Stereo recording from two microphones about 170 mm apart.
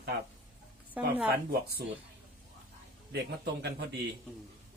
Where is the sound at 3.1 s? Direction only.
75° right (ahead or behind).